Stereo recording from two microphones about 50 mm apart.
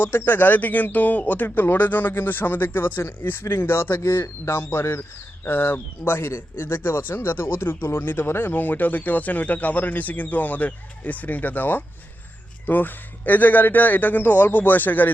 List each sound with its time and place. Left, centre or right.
0.0 s speech: left